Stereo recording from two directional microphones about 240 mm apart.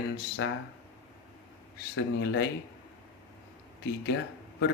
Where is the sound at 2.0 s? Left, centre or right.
Left.